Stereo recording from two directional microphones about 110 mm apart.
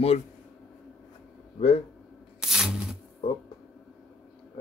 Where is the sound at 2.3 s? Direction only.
5° right (ahead or behind).